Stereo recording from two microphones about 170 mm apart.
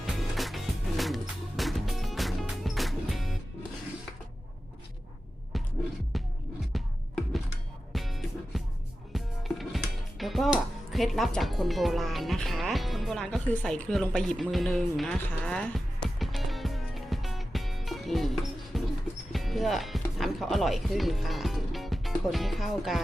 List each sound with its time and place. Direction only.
0.0 s music: centre (ahead or behind)
5.5 s music: centre (ahead or behind)
7.9 s music: centre (ahead or behind)
9.1 s speech: centre (ahead or behind)
16.1 s music: centre (ahead or behind)
20.1 s speech: centre (ahead or behind)